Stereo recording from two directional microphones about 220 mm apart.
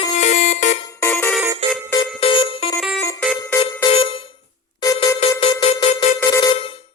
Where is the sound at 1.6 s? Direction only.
25° right (ahead or behind).